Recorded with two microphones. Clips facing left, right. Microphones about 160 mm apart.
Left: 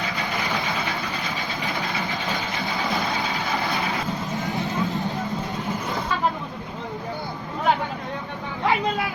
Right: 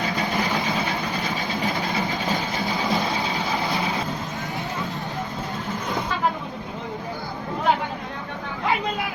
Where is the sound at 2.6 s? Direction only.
20° right (ahead or behind).